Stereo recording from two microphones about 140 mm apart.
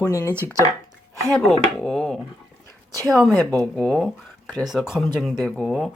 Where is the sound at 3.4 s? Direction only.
10° left (ahead or behind).